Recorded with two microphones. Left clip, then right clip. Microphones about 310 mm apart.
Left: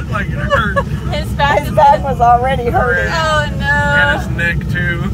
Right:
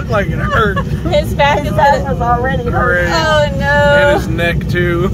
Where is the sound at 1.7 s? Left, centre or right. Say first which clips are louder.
Left 2 dB; left.